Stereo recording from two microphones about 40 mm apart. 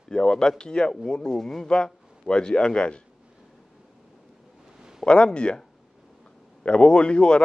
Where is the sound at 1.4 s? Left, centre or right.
Centre.